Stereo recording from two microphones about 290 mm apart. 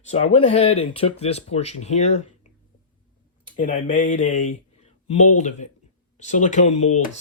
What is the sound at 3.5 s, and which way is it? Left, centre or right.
Speech, left.